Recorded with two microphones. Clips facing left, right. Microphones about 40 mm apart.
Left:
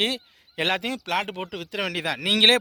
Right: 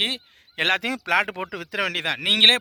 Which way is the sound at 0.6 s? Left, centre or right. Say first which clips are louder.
Right 3 dB; right.